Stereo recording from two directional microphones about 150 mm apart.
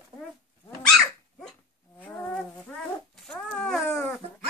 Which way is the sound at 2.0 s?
10° left (ahead or behind).